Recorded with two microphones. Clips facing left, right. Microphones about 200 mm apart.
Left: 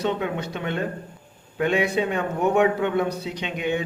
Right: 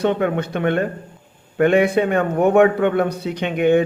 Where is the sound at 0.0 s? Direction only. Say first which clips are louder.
Right 6 dB; 55° right (ahead or behind).